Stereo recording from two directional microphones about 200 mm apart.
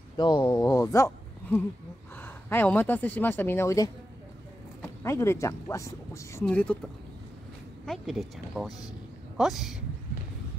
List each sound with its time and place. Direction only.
0.2 s speech: 20° left (ahead or behind); by 9.8 s centre (ahead or behind)